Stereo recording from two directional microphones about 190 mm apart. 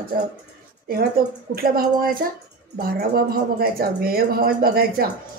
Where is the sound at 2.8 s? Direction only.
50° right (ahead or behind).